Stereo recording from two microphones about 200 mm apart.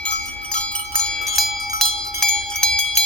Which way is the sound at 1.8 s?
5° left (ahead or behind).